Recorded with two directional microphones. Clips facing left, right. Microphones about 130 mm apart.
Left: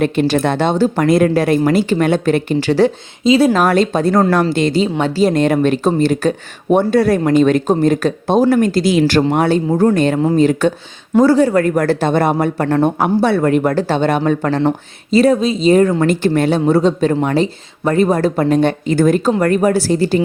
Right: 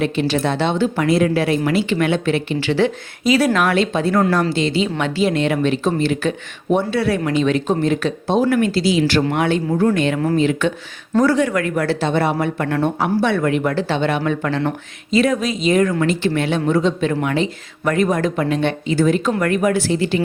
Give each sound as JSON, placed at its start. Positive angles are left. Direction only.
{"t": 0.0, "sound": "a woman's voice", "side_deg": 50}
{"t": 3.2, "sound": "speech", "side_deg": 25}
{"t": 3.6, "sound": "speech", "side_deg": 40}
{"t": 4.5, "sound": "a woman's voice", "side_deg": 50}
{"t": 4.8, "sound": "a woman's voice", "side_deg": 35}
{"t": 9.3, "sound": "speech", "side_deg": 35}
{"t": 16.0, "sound": "speech", "side_deg": 45}
{"t": 19.4, "sound": "speech", "side_deg": 35}